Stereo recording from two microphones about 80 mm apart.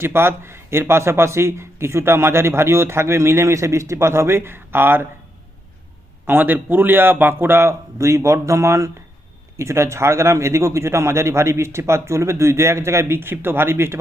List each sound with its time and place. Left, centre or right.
0.0 s speech: right
6.2 s a man's voice: right